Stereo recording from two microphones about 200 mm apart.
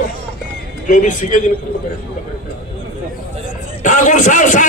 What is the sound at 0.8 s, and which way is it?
Speech, 40° left (ahead or behind).